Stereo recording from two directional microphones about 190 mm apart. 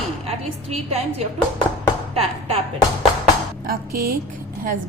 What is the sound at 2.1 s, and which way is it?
Speech, 30° right (ahead or behind).